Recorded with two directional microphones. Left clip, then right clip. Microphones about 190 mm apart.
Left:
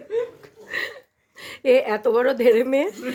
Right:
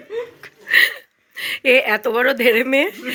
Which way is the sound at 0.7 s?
10° left (ahead or behind).